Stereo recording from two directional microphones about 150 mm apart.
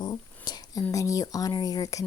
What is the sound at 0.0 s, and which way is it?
Speech, 25° left (ahead or behind).